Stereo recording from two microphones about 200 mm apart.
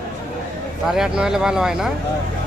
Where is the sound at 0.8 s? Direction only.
Centre (ahead or behind).